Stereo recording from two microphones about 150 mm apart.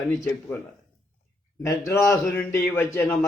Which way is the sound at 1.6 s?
20° left (ahead or behind).